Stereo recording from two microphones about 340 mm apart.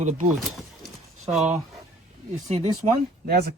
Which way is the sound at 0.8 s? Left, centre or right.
Centre.